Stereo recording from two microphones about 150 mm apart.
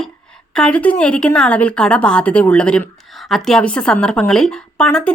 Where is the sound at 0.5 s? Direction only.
5° left (ahead or behind).